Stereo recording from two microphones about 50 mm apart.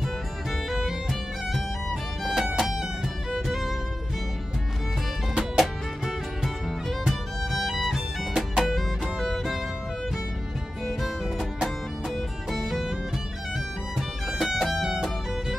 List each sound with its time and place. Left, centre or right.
0.7 s music: centre
5.3 s music: centre
10.9 s music: centre
13.9 s music: centre